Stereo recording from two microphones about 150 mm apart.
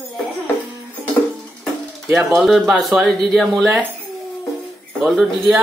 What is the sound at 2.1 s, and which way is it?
Speech, 5° right (ahead or behind).